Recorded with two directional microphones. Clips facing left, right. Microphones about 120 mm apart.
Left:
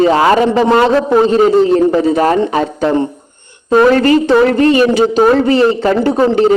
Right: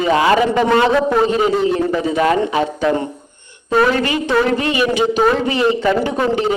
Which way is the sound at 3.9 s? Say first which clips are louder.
Left 8 dB; 40° left (ahead or behind).